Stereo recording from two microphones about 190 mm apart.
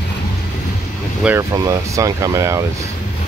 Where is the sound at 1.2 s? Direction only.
15° right (ahead or behind).